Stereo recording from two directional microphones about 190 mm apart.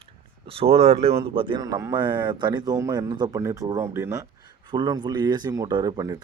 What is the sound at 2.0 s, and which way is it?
Speech, 25° right (ahead or behind).